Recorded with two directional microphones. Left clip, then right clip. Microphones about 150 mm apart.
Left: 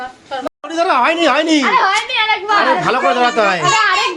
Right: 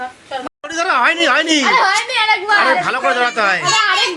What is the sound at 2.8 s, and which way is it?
Speech, 5° left (ahead or behind).